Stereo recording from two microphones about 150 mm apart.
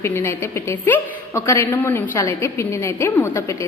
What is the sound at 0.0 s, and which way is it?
A woman's voice, 15° left (ahead or behind).